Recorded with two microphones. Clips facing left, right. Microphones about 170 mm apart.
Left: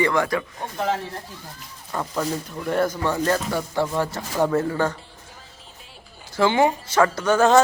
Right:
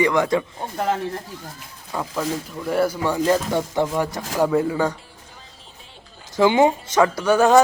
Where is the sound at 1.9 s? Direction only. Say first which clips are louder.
Right 1 dB; 5° right (ahead or behind).